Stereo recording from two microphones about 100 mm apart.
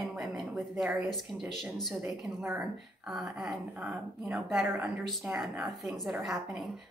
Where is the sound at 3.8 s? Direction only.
15° right (ahead or behind).